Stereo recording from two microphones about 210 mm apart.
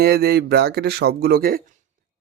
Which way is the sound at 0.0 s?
50° right (ahead or behind).